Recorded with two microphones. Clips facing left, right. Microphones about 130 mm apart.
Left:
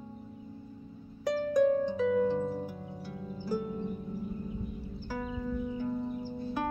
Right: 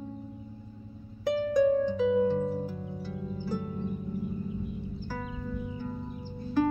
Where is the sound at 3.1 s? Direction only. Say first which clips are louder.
Right 4 dB; 20° left (ahead or behind).